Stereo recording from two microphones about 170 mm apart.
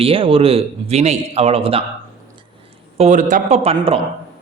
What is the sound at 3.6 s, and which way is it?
Speech, 35° right (ahead or behind).